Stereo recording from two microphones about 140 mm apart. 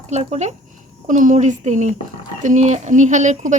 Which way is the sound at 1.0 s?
65° right (ahead or behind).